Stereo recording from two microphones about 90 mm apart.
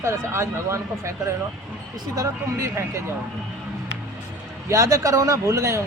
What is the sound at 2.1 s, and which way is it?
Speech, 35° right (ahead or behind).